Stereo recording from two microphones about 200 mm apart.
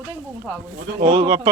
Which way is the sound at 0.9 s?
35° right (ahead or behind).